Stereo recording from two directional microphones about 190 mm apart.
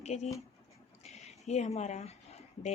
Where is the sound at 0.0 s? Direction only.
35° left (ahead or behind).